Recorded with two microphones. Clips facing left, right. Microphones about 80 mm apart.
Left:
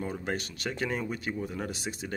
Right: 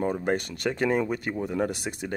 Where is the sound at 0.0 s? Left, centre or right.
Right.